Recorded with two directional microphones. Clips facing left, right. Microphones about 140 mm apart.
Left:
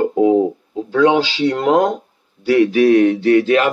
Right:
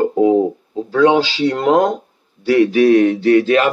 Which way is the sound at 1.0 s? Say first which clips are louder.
Right 1 dB; 40° right (ahead or behind).